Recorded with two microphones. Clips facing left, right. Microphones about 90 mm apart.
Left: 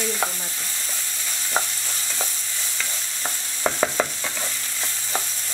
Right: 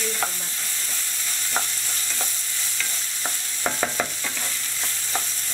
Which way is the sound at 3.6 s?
15° left (ahead or behind).